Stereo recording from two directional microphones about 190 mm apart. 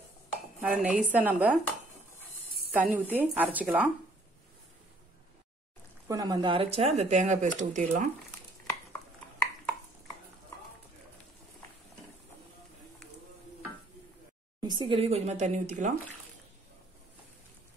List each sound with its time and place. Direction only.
0.6 s dishes: 5° right (ahead or behind)
1.1 s speech: 5° right (ahead or behind)
2.7 s speech: 10° right (ahead or behind)
6.0 s speech: 20° right (ahead or behind); by 8.0 s 40° right (ahead or behind)
14.6 s speech: 25° right (ahead or behind); by 15.9 s 40° right (ahead or behind)